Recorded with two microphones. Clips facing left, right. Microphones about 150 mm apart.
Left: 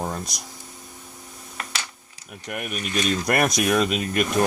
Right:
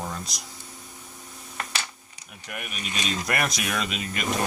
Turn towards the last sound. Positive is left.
turn(degrees=45)  # may be behind; listen again after turning